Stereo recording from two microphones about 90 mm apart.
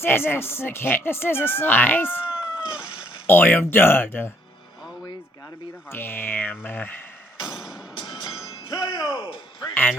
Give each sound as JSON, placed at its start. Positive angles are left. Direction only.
{"t": 0.0, "sound": "speech", "side_deg": 25}
{"t": 2.2, "sound": "cat", "side_deg": -15}
{"t": 3.2, "sound": "speech", "side_deg": 25}
{"t": 5.9, "sound": "speech", "side_deg": 25}
{"t": 7.4, "sound": "music", "side_deg": -10}
{"t": 7.9, "sound": "music", "side_deg": 55}
{"t": 8.7, "sound": "speech", "side_deg": 55}